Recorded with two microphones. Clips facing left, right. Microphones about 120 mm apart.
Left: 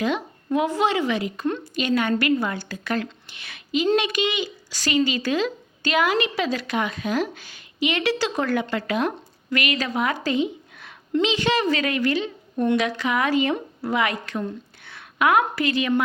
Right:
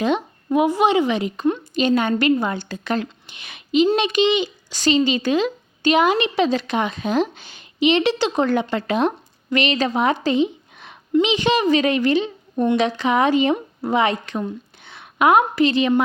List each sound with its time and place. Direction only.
0.0 s a child's voice: 20° right (ahead or behind)